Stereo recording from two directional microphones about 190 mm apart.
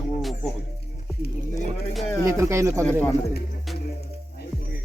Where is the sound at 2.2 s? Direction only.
15° right (ahead or behind).